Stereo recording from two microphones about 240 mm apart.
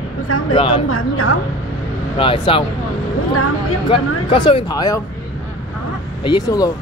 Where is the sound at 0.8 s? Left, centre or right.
Left.